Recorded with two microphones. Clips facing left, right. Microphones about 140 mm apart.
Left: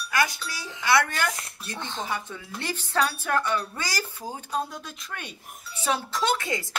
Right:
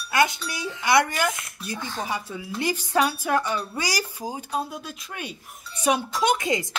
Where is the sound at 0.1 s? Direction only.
20° right (ahead or behind).